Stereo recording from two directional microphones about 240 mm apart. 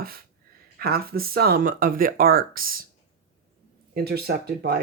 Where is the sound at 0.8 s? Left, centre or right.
Right.